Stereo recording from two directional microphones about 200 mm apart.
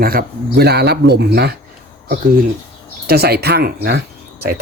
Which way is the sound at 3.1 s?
50° right (ahead or behind).